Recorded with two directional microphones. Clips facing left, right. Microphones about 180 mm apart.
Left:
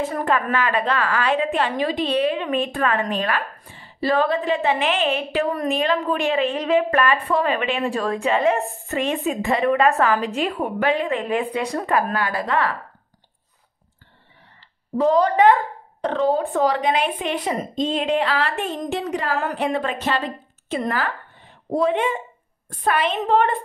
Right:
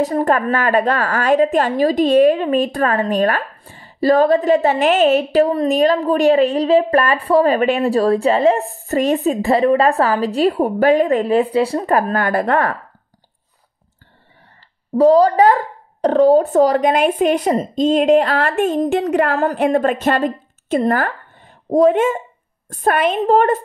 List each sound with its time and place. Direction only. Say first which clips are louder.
0.0 s a woman's voice: right 6 dB; 40° right (ahead or behind)
15.0 s a woman's voice: right 6 dB; 35° right (ahead or behind); by 19.3 s 55° right (ahead or behind)
19.3 s speech: right 7 dB; 45° right (ahead or behind)